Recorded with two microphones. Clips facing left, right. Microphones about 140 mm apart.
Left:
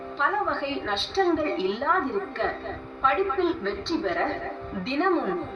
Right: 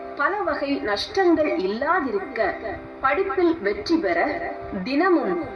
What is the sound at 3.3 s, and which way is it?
A woman's voice, 55° right (ahead or behind).